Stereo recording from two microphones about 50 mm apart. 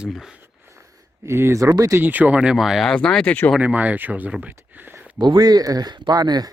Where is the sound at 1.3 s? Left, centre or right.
Right.